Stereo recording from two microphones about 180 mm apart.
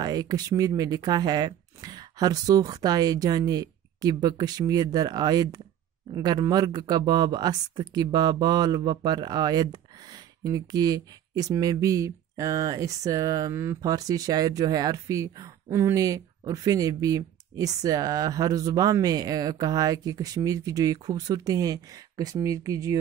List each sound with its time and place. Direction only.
0.0 s speech: 20° right (ahead or behind)